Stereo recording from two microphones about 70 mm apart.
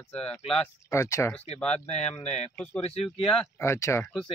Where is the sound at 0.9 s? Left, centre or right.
Left.